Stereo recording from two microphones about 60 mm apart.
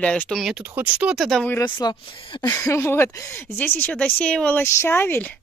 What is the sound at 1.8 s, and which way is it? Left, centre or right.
Speech, left.